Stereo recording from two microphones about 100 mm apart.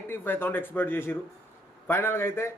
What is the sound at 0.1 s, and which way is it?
A man's voice, 20° left (ahead or behind).